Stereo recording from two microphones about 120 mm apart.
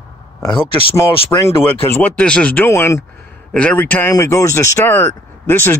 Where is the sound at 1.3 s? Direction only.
25° left (ahead or behind).